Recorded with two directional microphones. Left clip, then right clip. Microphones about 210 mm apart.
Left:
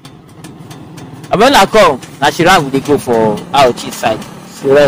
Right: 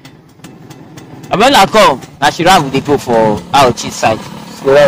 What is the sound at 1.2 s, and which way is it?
Speech, 20° right (ahead or behind).